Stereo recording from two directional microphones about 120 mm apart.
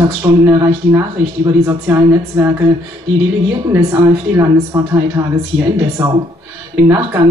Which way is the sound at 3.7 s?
20° right (ahead or behind).